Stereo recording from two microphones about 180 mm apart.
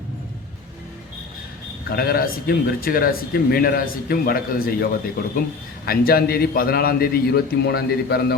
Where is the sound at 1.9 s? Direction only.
55° left (ahead or behind).